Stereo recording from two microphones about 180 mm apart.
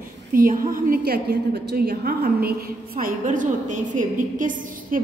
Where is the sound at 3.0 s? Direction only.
45° right (ahead or behind).